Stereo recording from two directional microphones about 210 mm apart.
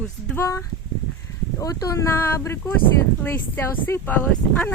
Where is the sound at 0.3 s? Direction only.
15° left (ahead or behind).